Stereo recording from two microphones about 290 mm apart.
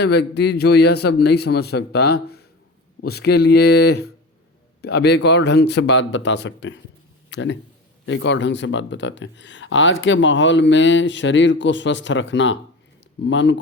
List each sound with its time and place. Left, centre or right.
0.0 s speech: left